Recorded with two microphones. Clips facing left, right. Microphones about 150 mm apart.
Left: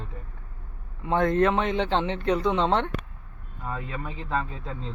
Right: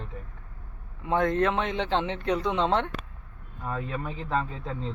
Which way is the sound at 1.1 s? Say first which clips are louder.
Left 2 dB; centre (ahead or behind).